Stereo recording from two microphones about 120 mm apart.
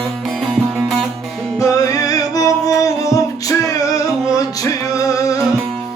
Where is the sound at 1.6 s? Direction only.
30° left (ahead or behind).